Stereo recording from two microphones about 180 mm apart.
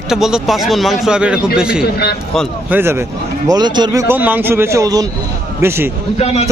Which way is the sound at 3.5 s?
25° right (ahead or behind).